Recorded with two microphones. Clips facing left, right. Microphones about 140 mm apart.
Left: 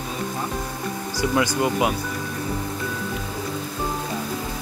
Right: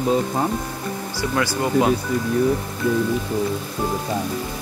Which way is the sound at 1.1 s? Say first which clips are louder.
Left 2 dB; 15° left (ahead or behind).